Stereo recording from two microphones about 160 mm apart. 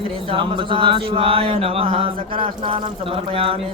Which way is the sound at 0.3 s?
35° right (ahead or behind).